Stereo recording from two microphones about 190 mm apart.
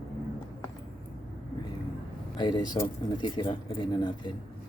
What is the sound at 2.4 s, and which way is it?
Speech, 25° left (ahead or behind).